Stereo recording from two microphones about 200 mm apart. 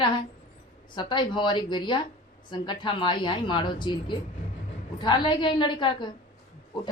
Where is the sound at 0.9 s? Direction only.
25° left (ahead or behind).